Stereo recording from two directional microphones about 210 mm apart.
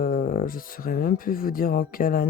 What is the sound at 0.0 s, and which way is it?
Speech, 45° left (ahead or behind).